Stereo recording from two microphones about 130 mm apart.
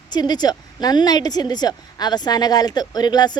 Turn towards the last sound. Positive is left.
turn(degrees=35)  # may be behind; listen again after turning